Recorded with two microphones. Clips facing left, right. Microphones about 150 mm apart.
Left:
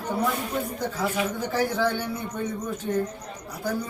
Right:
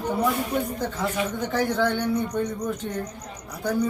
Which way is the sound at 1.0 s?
5° left (ahead or behind).